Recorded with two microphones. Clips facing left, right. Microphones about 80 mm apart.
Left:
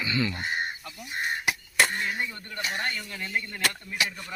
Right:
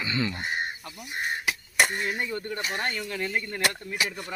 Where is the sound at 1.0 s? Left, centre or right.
Centre.